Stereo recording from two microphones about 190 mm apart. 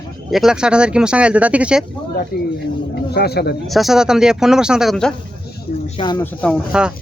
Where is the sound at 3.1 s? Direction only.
55° left (ahead or behind).